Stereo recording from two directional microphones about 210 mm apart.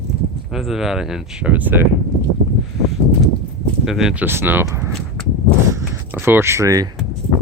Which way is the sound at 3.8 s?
Centre (ahead or behind).